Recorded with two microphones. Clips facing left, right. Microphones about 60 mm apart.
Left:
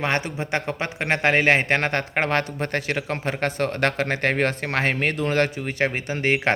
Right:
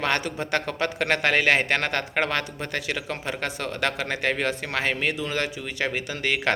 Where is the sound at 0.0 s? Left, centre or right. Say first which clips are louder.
Left 1 dB; left.